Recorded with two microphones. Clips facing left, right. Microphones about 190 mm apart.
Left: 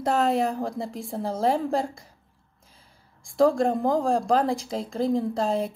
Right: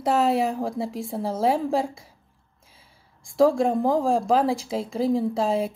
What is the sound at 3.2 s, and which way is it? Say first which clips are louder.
A woman's voice: right 1 dB; centre (ahead or behind).